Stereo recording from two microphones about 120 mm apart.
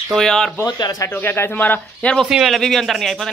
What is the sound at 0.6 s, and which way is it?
Speech, 35° left (ahead or behind).